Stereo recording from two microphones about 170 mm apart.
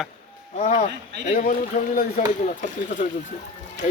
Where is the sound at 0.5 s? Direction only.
40° left (ahead or behind).